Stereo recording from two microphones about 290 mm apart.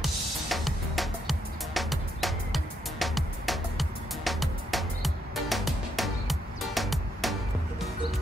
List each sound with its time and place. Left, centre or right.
0.0 s music: centre